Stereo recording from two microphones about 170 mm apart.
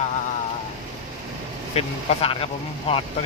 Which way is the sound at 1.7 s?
35° left (ahead or behind).